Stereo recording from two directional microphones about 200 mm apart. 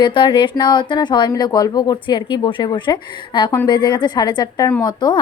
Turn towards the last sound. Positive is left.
turn(degrees=20)  # may be behind; listen again after turning